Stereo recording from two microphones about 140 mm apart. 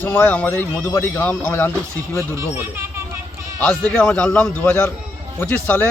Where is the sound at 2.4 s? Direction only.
15° right (ahead or behind).